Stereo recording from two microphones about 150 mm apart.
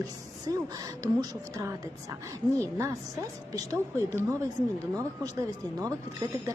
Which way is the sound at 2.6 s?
20° right (ahead or behind).